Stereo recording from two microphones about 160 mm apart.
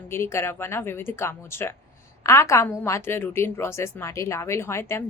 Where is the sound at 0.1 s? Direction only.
15° left (ahead or behind).